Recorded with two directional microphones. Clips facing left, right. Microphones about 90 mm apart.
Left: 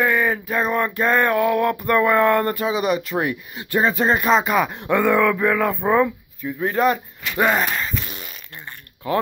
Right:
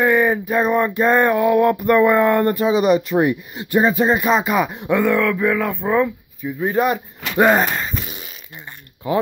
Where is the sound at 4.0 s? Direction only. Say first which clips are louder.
Right 1 dB; 10° right (ahead or behind).